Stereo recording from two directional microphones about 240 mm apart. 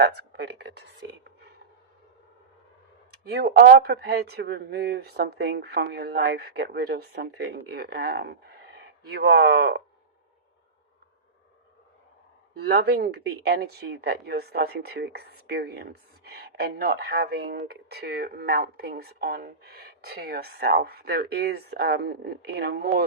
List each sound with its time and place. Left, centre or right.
0.0 s speech: right
3.1 s speech: right
12.6 s speech: right